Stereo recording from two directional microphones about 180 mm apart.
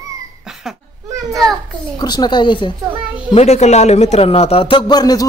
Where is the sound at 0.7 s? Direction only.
5° right (ahead or behind).